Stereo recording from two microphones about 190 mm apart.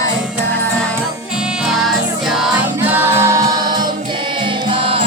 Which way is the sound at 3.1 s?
35° right (ahead or behind).